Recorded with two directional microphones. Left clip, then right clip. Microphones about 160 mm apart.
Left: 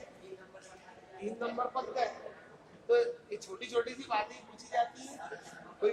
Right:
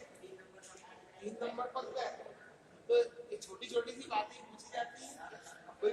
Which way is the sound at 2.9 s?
40° left (ahead or behind).